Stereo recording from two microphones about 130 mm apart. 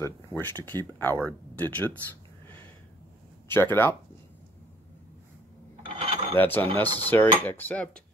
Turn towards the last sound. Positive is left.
turn(degrees=15)  # may be behind; listen again after turning